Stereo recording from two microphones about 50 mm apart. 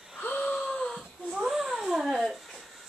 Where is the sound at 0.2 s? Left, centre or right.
Left.